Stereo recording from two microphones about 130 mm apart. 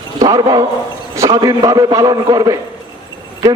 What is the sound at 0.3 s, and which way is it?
A man's voice, 30° right (ahead or behind).